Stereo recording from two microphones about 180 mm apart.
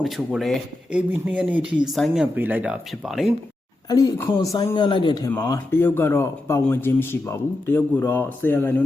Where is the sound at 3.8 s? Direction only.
20° left (ahead or behind).